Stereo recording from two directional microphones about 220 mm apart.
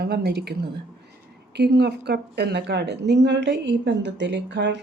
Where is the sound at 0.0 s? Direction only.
50° right (ahead or behind).